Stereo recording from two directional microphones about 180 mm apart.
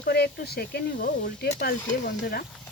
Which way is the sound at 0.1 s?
60° left (ahead or behind).